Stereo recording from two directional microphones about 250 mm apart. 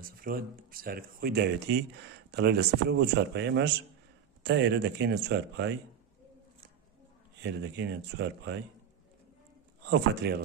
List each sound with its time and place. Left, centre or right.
0.0 s speech: right
7.4 s speech: right
9.8 s speech: right